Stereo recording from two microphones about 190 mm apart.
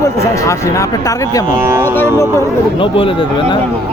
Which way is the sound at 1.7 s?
15° right (ahead or behind).